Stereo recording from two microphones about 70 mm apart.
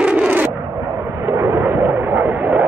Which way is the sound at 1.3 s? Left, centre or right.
Right.